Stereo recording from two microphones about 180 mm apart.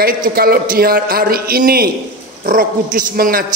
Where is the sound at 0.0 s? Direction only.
55° right (ahead or behind).